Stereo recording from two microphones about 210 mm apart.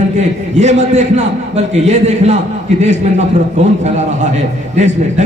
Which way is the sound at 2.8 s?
35° right (ahead or behind).